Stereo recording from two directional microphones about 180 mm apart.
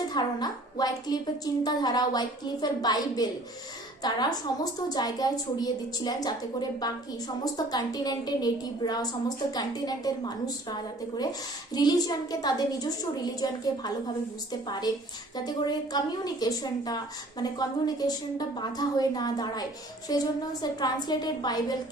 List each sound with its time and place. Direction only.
0.1 s a woman's voice: 20° left (ahead or behind)